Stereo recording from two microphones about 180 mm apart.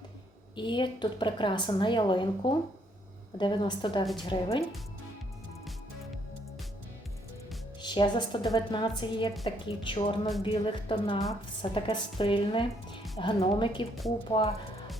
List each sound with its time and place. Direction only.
0.5 s a woman's voice: 25° left (ahead or behind)
7.8 s a woman's voice: 25° left (ahead or behind)